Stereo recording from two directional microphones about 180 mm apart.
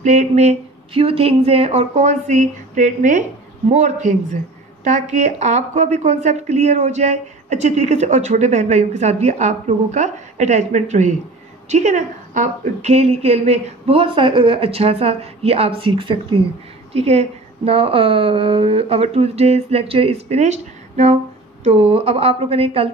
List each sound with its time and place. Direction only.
0.0 s a woman's voice: 40° right (ahead or behind)